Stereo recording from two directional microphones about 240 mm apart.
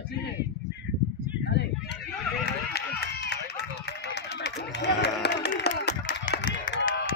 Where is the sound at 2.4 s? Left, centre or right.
Left.